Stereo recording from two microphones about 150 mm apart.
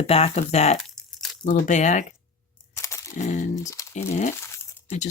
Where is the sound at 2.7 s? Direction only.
20° left (ahead or behind).